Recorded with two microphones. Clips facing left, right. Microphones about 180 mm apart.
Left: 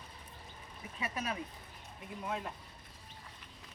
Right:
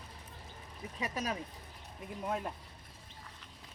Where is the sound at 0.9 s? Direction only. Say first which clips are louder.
Right 1 dB; 40° right (ahead or behind).